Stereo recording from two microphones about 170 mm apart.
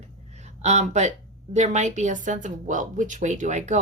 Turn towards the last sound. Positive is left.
turn(degrees=-45)  # may be behind; listen again after turning